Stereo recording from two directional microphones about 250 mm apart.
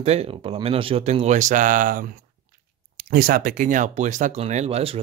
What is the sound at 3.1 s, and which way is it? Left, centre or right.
Speech, right.